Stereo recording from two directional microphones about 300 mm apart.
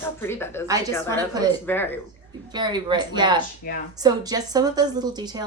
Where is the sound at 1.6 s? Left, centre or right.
Centre.